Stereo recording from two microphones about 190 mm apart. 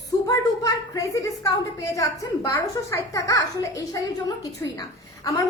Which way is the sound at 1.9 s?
15° left (ahead or behind).